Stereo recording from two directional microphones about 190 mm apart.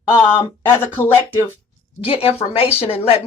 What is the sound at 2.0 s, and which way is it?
A woman's voice, 30° left (ahead or behind).